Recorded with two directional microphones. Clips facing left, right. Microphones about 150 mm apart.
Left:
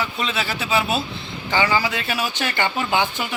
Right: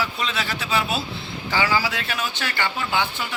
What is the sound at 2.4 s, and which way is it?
Speech, 20° left (ahead or behind).